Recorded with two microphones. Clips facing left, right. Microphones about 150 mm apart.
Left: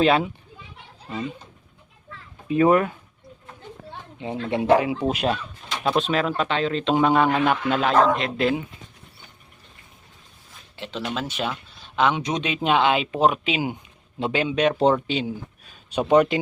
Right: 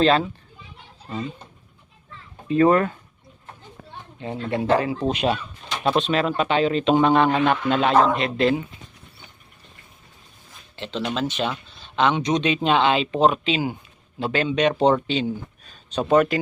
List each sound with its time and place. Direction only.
0.0 s speech: 10° left (ahead or behind)
2.5 s speech: 10° left (ahead or behind)
4.4 s a man's voice: 15° left (ahead or behind); by 6.9 s 15° right (ahead or behind)
6.9 s a man's voice: 5° left (ahead or behind)
10.8 s a man's voice: 5° left (ahead or behind)
14.4 s speech: 5° left (ahead or behind)